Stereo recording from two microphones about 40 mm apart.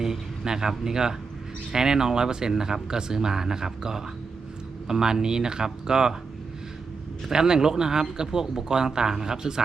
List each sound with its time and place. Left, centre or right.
0.0 s speech: centre
7.3 s speech: centre